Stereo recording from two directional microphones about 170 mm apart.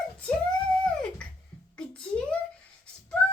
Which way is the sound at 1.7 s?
5° left (ahead or behind).